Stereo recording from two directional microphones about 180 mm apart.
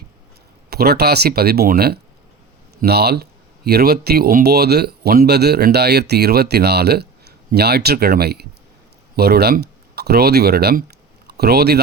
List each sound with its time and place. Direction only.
0.7 s speech: 60° right (ahead or behind)